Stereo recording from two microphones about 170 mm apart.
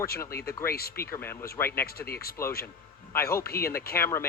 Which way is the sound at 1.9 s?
65° left (ahead or behind).